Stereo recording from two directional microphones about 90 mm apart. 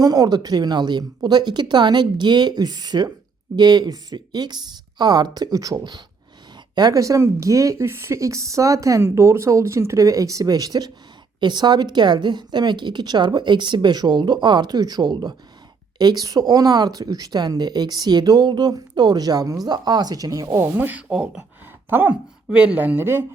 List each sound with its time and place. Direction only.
0.0 s a woman's voice: 40° right (ahead or behind)
20.7 s speech: 20° right (ahead or behind)
21.8 s speech: 20° right (ahead or behind)